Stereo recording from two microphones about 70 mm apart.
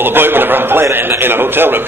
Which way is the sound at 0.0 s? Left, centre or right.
Right.